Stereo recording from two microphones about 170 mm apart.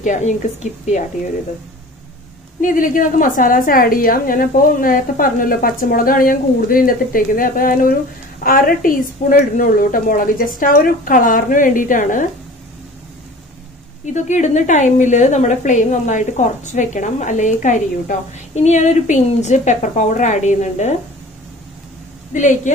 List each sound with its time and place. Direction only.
0.0 s a woman's voice: 45° left (ahead or behind)
2.6 s a woman's voice: 55° left (ahead or behind)
14.1 s a woman's voice: 45° left (ahead or behind)